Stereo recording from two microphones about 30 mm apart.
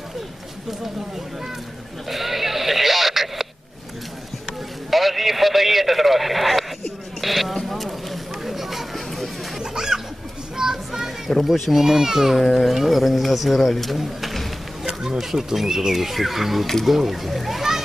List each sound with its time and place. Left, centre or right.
2.0 s sheep: centre
4.9 s a man's voice: centre
7.2 s a sound: centre
9.6 s a sound: centre
10.6 s child singing: centre
11.5 s speech: centre
11.8 s speech: centre
14.0 s a sound: centre
15.2 s speech: centre
17.6 s splash: centre